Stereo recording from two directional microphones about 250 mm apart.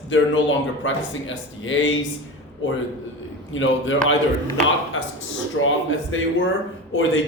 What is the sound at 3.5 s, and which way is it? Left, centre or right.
Speech, left.